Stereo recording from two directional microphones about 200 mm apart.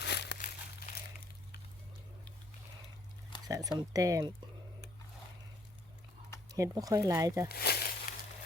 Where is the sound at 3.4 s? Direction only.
20° right (ahead or behind).